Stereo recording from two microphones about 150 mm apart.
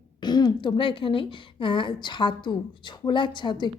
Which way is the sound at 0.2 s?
30° left (ahead or behind).